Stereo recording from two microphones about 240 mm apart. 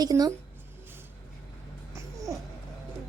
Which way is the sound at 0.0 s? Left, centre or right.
Centre.